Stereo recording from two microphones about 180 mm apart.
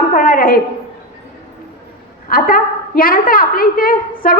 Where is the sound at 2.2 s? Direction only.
50° left (ahead or behind).